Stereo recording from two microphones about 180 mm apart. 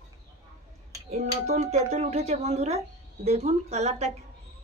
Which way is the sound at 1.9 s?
40° right (ahead or behind).